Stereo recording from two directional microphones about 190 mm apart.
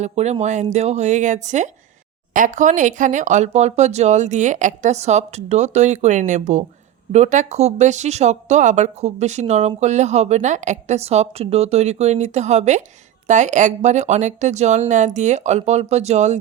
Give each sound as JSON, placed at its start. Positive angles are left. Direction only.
{"t": 0.0, "sound": "speech", "side_deg": -35}